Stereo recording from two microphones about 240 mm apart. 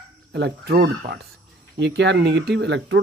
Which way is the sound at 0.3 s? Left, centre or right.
Right.